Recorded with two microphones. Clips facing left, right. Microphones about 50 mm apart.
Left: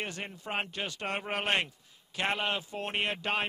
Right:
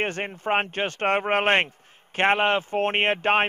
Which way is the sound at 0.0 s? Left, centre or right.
Right.